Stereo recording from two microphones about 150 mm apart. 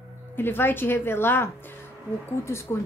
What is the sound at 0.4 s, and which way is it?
Speech, 15° left (ahead or behind).